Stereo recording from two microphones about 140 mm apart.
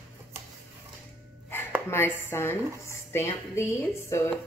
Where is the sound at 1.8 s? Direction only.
20° left (ahead or behind).